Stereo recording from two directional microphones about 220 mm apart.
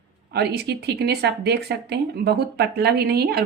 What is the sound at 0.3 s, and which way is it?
Speech, 45° right (ahead or behind).